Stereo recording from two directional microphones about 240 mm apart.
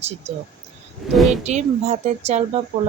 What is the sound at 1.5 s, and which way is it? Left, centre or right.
Speech, right.